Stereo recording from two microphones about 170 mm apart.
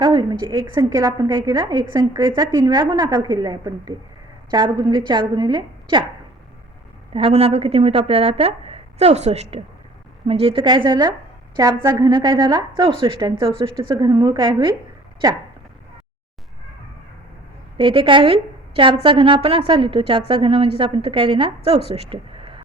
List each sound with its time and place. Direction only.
0.0 s a woman's voice: 25° right (ahead or behind)
7.1 s a woman's voice: 35° right (ahead or behind)
17.7 s a woman's voice: 30° right (ahead or behind)
21.8 s a sound: 35° right (ahead or behind)